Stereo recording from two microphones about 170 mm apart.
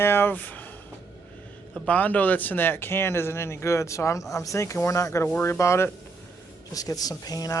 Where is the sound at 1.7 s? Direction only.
5° left (ahead or behind).